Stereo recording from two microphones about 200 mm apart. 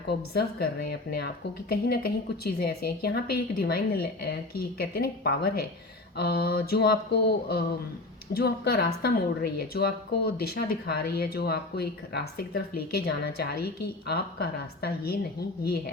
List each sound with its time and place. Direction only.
0.1 s a woman's voice: 55° left (ahead or behind)